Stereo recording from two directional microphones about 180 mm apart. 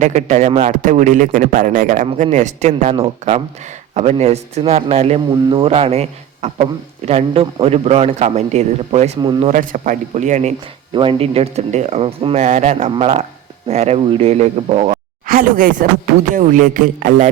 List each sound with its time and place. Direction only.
0.0 s a man's voice: 40° right (ahead or behind)
9.2 s speech: 25° right (ahead or behind)
9.5 s speech: 45° right (ahead or behind)
10.9 s a man's voice: 30° right (ahead or behind)
15.3 s speech: 50° right (ahead or behind)